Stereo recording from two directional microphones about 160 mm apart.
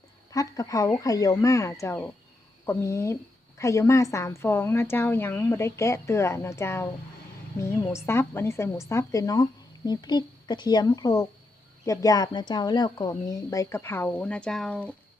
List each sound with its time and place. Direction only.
0.3 s a woman's voice: 20° left (ahead or behind); by 14.8 s 5° left (ahead or behind)